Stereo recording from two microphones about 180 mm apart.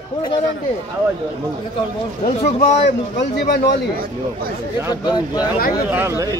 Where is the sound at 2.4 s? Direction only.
40° left (ahead or behind).